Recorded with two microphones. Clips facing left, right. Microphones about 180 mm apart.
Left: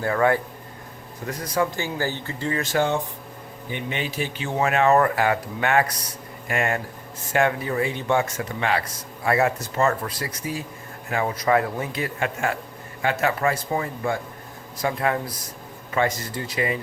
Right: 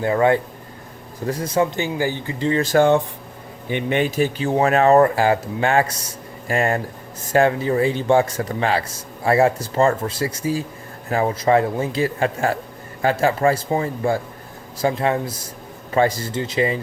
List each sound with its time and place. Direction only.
0.0 s a man's voice: 20° right (ahead or behind)
2.7 s a man's voice: 55° right (ahead or behind); by 16.8 s 25° right (ahead or behind)